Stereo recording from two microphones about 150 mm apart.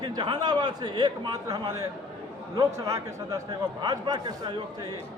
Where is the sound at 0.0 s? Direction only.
30° right (ahead or behind).